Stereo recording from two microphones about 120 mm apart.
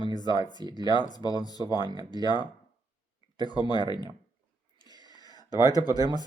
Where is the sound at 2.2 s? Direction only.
35° left (ahead or behind).